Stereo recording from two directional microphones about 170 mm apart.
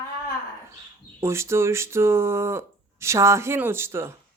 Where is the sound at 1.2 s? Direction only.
15° right (ahead or behind).